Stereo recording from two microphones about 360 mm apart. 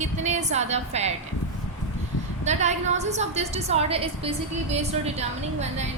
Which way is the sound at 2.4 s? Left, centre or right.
Centre.